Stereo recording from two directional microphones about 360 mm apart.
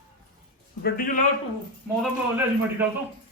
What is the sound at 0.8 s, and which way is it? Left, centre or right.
Speech, left.